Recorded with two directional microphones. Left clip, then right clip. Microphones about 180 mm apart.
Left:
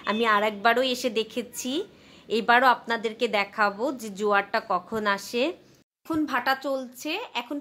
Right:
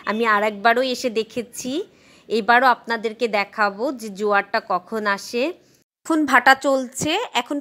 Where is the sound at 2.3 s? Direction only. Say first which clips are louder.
Right 4 dB; 30° right (ahead or behind).